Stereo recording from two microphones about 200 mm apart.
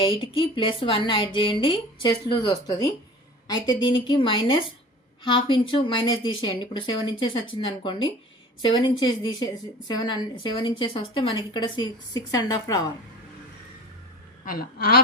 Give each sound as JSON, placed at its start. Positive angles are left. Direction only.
{"t": 0.0, "sound": "a woman's voice", "side_deg": 25}
{"t": 14.4, "sound": "a woman's voice", "side_deg": 45}